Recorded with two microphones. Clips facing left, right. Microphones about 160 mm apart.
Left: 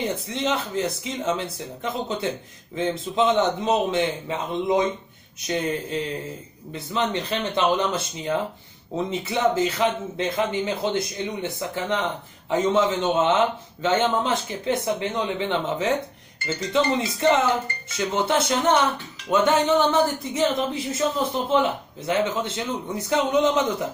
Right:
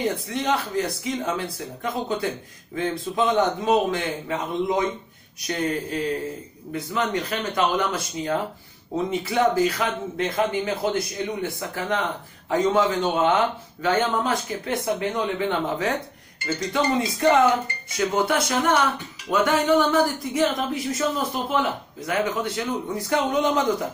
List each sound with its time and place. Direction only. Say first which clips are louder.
0.0 s speech: right 1 dB; 20° left (ahead or behind)
5.5 s speech: even; 20° left (ahead or behind)